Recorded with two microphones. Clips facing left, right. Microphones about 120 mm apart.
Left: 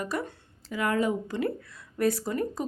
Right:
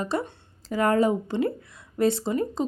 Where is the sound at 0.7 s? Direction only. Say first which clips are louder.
Right 5 dB; 40° right (ahead or behind); by 2.7 s 25° right (ahead or behind).